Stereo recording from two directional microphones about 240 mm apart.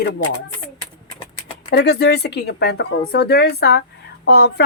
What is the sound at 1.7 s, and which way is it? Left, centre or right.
A woman's voice, left.